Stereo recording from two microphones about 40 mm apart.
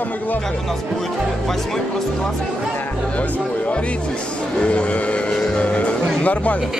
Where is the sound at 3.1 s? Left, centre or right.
Left.